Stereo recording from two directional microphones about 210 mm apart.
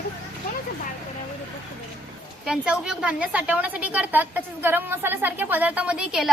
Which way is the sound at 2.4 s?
5° right (ahead or behind).